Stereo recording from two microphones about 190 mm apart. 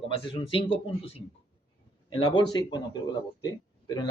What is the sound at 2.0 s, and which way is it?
Speech, 25° left (ahead or behind).